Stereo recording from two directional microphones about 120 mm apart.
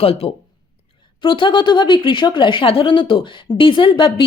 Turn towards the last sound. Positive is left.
turn(degrees=45)  # may be behind; listen again after turning